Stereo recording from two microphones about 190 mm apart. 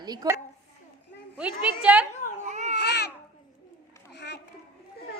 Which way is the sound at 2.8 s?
60° left (ahead or behind).